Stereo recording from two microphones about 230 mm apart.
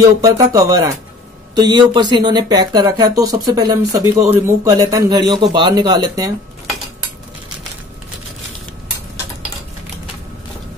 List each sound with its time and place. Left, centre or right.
0.2 s speech: centre